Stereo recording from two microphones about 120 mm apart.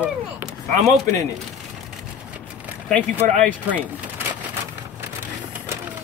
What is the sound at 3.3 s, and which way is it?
Speech, 15° left (ahead or behind).